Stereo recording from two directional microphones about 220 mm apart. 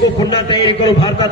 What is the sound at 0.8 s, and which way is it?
Speech, 25° left (ahead or behind).